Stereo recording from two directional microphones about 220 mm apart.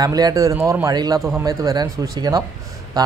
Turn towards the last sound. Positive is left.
turn(degrees=-15)  # may be behind; listen again after turning